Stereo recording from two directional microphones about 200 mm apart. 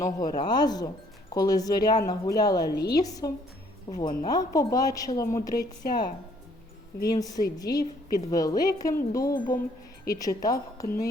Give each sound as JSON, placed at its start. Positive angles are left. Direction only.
{"t": 0.0, "sound": "speech", "side_deg": 20}
{"t": 7.1, "sound": "speech", "side_deg": 20}